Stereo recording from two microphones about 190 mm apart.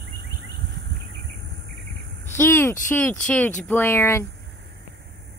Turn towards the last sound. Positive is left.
turn(degrees=15)  # may be behind; listen again after turning